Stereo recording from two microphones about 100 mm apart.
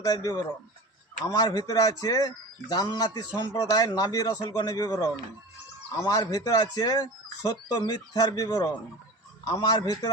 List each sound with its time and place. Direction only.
0.0 s speech: 40° left (ahead or behind)